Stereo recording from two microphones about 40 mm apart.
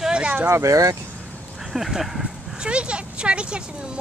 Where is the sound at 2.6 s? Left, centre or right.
Right.